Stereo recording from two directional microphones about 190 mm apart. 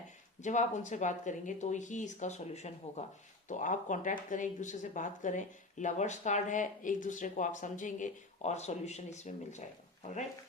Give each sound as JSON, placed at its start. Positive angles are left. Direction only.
{"t": 0.4, "sound": "speech", "side_deg": 40}